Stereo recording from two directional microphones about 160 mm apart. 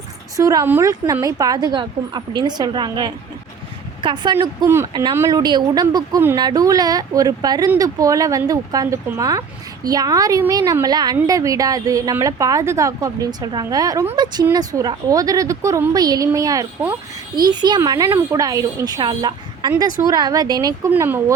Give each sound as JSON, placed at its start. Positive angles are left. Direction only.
{"t": 0.3, "sound": "a woman's voice", "side_deg": -20}
{"t": 4.7, "sound": "a woman's voice", "side_deg": -15}